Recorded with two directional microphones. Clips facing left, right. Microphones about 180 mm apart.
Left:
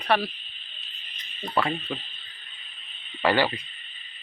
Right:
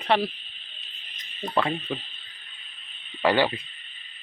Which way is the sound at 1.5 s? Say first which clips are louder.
Right 1 dB; 15° right (ahead or behind).